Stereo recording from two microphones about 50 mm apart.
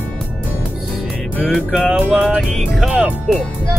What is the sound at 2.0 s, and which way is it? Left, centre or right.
Speech, right.